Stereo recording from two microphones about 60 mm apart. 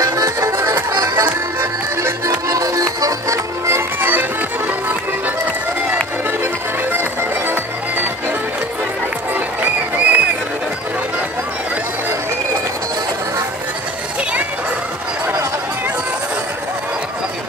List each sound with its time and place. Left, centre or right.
0.0 s music: right
2.4 s music: right
3.7 s music: right
6.4 s music: right
9.3 s music: right